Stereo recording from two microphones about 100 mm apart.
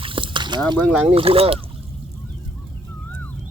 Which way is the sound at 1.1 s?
70° right (ahead or behind).